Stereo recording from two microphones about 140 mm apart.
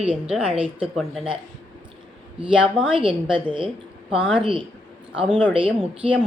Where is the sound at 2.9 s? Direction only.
40° right (ahead or behind).